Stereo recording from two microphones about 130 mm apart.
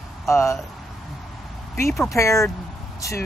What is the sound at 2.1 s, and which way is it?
Speech, 25° left (ahead or behind).